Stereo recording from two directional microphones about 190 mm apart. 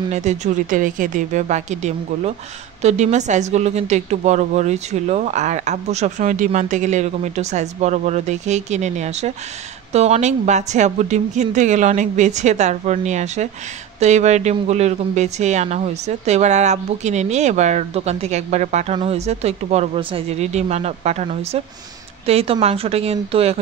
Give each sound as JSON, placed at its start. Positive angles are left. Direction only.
{"t": 0.1, "sound": "a woman's voice", "side_deg": -35}